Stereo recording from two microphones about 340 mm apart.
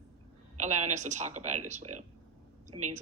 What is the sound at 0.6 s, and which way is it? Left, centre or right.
Speech, right.